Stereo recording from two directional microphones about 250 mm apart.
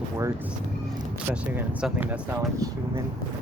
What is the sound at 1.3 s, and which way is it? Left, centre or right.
Speech, centre.